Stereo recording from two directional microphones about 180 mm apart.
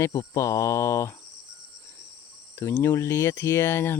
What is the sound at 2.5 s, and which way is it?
Speech, 10° left (ahead or behind).